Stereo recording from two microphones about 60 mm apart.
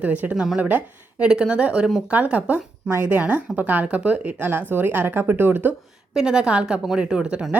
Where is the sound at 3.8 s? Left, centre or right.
Right.